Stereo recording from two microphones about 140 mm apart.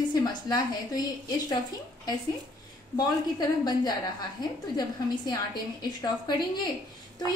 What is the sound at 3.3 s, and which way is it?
A woman's voice, 30° left (ahead or behind).